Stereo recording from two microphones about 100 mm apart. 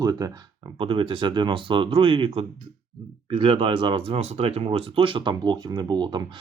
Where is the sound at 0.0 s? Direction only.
40° right (ahead or behind).